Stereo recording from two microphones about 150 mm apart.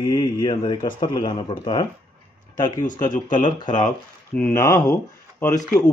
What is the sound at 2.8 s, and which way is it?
Speech, 60° left (ahead or behind).